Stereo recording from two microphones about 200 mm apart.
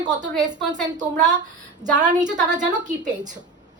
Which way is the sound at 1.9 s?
35° right (ahead or behind).